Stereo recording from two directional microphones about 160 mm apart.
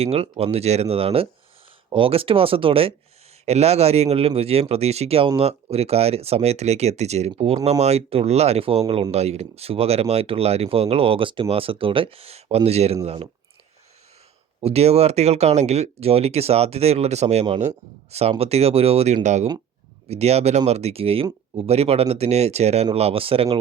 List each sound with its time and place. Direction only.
0.0 s speech: 40° right (ahead or behind)
14.6 s speech: 40° right (ahead or behind)